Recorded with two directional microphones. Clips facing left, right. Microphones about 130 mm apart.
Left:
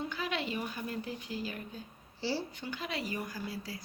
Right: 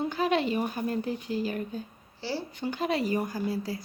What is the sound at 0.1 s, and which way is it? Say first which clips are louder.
Speech: right 9 dB; 45° right (ahead or behind).